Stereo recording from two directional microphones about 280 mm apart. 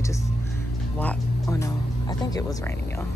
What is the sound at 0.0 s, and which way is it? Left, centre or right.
Music, centre.